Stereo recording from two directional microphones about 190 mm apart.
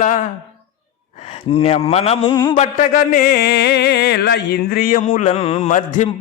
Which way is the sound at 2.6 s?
45° left (ahead or behind).